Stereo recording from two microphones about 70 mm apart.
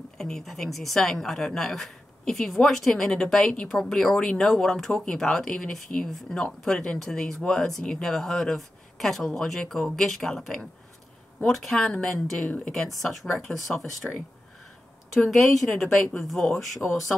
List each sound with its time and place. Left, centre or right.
0.2 s a woman's voice: centre
12.4 s speech: left
12.7 s a woman's voice: centre
15.3 s a woman's voice: centre